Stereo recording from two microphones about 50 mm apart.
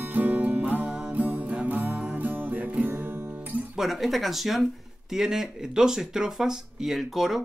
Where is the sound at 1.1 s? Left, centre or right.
Right.